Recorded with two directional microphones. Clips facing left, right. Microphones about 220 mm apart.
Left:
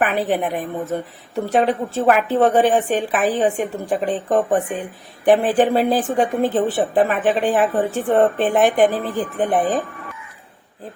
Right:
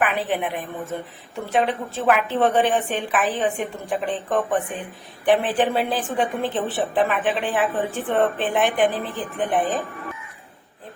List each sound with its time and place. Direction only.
0.0 s a woman's voice: 45° left (ahead or behind)